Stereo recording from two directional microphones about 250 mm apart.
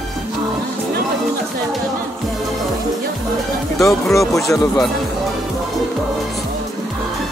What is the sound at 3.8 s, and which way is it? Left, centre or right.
Speech, centre.